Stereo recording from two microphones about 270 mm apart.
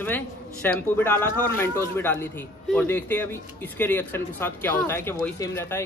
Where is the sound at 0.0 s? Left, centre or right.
Centre.